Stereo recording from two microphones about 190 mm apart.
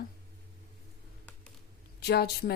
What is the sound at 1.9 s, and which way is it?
Speech, 60° left (ahead or behind).